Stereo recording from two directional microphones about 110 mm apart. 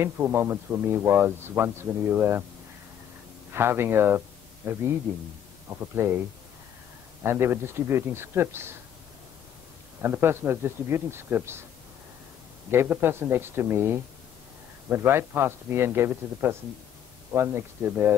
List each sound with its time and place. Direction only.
0.0 s speech: 20° right (ahead or behind)
3.5 s speech: 20° right (ahead or behind)
7.2 s speech: 20° right (ahead or behind)
10.0 s speech: 20° right (ahead or behind)
12.7 s speech: 20° right (ahead or behind)